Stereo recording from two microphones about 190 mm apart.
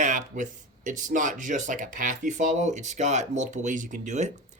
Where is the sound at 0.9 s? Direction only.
40° right (ahead or behind).